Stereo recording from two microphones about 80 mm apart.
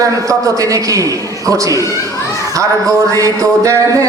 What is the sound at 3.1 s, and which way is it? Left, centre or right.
Speech, right.